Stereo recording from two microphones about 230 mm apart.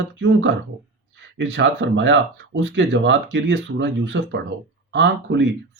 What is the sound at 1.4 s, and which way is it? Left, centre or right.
Speech, right.